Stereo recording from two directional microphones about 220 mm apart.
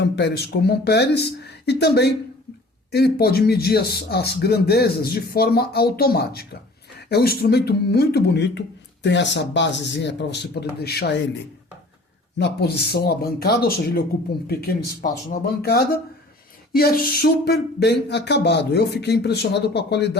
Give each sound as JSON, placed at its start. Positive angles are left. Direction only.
{"t": 0.0, "sound": "speech", "side_deg": 50}
{"t": 12.4, "sound": "speech", "side_deg": 45}